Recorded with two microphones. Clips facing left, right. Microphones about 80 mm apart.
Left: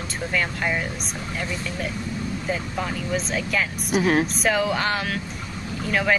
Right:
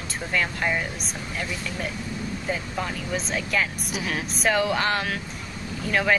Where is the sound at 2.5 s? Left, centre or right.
Centre.